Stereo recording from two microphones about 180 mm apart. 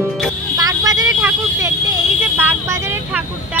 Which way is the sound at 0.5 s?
20° right (ahead or behind).